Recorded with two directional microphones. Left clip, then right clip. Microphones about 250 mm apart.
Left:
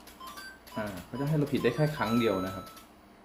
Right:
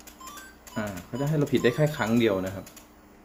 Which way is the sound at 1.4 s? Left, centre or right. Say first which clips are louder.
Right 5 dB; right.